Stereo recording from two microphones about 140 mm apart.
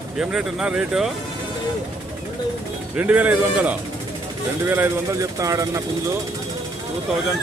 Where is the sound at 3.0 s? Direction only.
10° right (ahead or behind).